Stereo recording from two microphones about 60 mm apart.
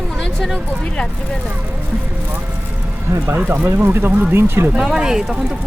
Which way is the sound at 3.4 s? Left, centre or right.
Right.